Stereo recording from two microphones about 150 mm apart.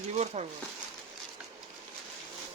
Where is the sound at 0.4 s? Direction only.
45° right (ahead or behind).